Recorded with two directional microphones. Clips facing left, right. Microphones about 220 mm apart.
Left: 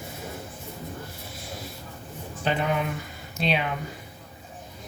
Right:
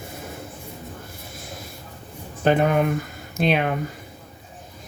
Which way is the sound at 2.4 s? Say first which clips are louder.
Right 8 dB; 50° right (ahead or behind).